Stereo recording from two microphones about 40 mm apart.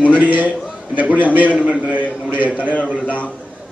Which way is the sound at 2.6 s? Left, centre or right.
Left.